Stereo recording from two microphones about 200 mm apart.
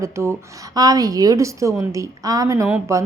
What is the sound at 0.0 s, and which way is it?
A woman's voice, 15° right (ahead or behind).